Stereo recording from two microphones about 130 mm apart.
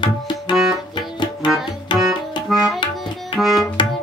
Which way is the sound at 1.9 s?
35° left (ahead or behind).